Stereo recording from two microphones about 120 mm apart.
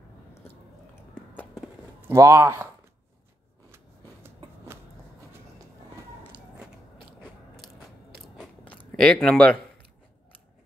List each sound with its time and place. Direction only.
1.1 s a sound: 15° left (ahead or behind)
2.0 s speech: 20° right (ahead or behind)
8.9 s speech: 5° left (ahead or behind)